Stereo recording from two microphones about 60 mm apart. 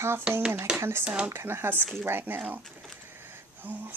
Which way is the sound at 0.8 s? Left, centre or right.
Right.